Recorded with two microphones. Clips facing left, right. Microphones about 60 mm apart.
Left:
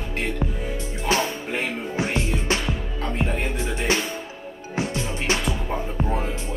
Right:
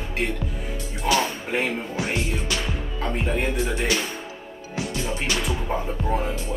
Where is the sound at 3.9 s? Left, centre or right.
Left.